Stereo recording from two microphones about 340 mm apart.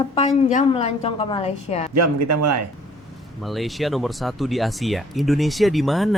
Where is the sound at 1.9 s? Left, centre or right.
Right.